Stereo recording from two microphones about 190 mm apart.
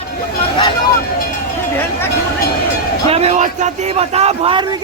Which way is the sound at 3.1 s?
35° right (ahead or behind).